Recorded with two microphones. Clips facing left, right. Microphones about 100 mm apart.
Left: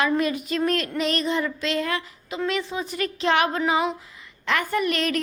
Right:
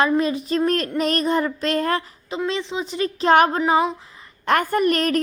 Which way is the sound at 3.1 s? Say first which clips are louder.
Right 6 dB; 40° right (ahead or behind).